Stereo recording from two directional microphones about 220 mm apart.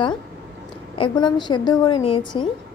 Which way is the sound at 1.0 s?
20° left (ahead or behind).